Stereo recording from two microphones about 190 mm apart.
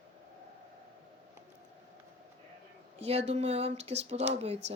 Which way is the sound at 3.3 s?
35° right (ahead or behind).